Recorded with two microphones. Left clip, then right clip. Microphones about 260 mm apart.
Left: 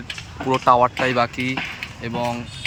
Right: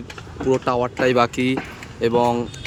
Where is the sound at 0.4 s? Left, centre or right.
Centre.